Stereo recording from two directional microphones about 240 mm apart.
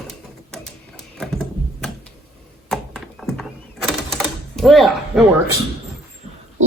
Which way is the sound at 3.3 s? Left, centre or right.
Centre.